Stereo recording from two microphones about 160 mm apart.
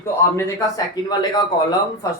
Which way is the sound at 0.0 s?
15° left (ahead or behind).